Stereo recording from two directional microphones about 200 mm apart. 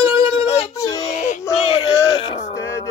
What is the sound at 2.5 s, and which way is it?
Speech, 15° left (ahead or behind).